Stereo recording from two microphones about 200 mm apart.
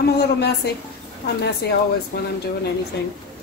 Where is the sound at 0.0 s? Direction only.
55° left (ahead or behind).